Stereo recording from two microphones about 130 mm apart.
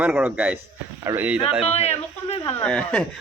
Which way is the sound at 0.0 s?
15° right (ahead or behind).